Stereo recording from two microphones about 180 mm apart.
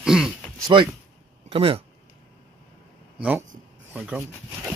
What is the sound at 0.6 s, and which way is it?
Speech, 25° right (ahead or behind).